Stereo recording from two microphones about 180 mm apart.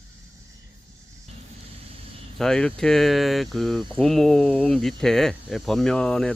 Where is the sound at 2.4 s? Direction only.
5° left (ahead or behind).